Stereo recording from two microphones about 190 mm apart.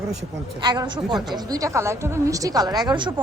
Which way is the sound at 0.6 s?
25° right (ahead or behind).